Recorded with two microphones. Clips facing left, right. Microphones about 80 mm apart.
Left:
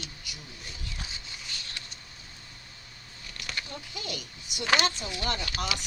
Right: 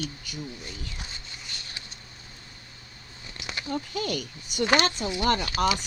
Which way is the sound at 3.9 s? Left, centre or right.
Right.